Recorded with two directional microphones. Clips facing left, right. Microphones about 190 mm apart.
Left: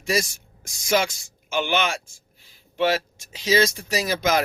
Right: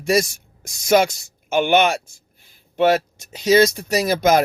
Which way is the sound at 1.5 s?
55° right (ahead or behind).